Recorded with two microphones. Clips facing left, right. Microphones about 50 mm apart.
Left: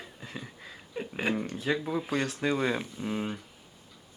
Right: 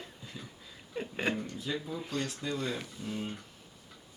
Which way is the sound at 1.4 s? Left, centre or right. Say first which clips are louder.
Left 6 dB; left.